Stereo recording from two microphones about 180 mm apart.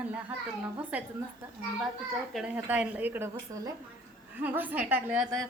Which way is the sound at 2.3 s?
5° right (ahead or behind).